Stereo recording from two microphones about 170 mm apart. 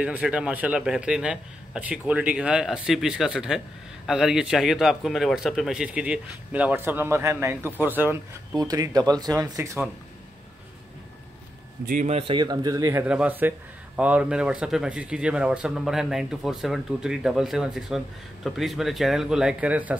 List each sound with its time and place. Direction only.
0.0 s a man's voice: 5° right (ahead or behind)
11.9 s a man's voice: 50° right (ahead or behind)
12.2 s speech: 30° right (ahead or behind)
13.0 s a man's voice: 5° right (ahead or behind)